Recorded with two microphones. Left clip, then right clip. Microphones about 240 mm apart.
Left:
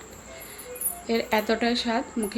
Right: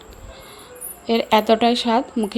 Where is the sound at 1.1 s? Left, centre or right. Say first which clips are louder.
Right 8 dB; right.